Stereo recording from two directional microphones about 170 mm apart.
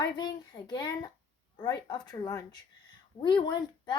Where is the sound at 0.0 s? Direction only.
25° left (ahead or behind).